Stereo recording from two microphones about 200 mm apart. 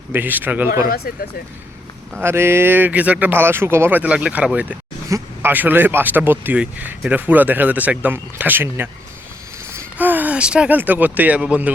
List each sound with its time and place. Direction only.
0.1 s speech: 10° right (ahead or behind)
0.9 s speech: 50° left (ahead or behind)
2.2 s speech: 10° right (ahead or behind)